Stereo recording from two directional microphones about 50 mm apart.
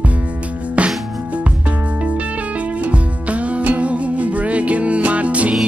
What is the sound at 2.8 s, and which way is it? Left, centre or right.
Music, right.